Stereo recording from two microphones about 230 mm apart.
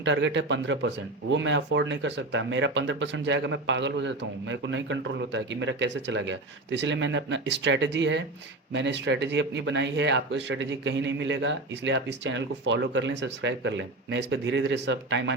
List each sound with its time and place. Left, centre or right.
0.0 s speech: right